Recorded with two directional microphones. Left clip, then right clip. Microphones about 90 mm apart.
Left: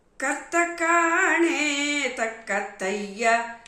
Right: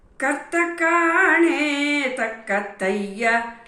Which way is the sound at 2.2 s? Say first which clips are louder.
Right 3 dB; 35° left (ahead or behind).